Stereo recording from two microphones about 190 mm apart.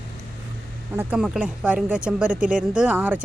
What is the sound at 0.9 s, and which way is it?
Speech, 5° right (ahead or behind).